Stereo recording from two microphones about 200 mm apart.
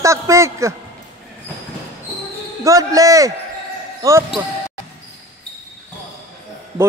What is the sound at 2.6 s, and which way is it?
A man's voice, 15° right (ahead or behind).